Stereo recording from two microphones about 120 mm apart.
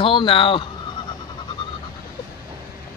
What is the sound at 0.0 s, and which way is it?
Speech, 45° left (ahead or behind).